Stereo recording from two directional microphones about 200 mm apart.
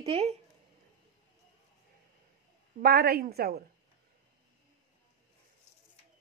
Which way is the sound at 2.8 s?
50° right (ahead or behind).